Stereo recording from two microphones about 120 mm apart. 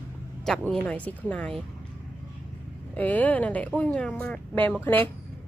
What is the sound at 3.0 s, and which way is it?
Speech, 15° left (ahead or behind).